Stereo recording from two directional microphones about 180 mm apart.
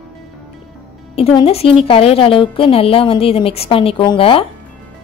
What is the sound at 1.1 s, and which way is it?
A woman's voice, 35° left (ahead or behind).